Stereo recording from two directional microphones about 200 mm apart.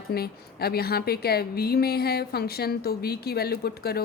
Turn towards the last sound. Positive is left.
turn(degrees=50)  # may be behind; listen again after turning